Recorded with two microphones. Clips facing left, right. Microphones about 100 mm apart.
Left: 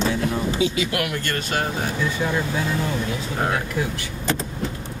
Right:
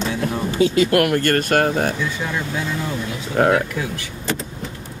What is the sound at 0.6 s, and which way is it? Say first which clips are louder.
Speech: right 11 dB; 50° right (ahead or behind).